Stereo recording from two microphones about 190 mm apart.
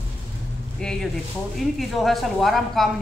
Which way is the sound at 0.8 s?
5° left (ahead or behind).